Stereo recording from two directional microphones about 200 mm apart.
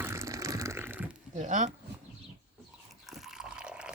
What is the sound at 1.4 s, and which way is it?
Speech, 40° right (ahead or behind).